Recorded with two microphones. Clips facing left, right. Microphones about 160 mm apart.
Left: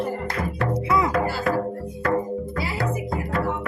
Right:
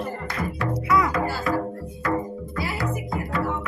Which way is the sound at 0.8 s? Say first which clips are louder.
Right 1 dB; 25° left (ahead or behind).